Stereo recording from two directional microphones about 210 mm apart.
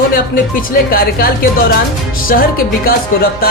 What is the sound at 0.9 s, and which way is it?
Speech, 45° left (ahead or behind).